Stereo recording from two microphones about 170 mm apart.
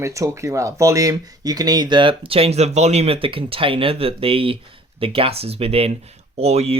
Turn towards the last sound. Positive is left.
turn(degrees=-40)  # may be behind; listen again after turning